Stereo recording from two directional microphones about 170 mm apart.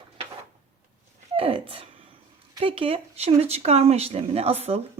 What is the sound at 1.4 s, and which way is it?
Speech, 30° right (ahead or behind).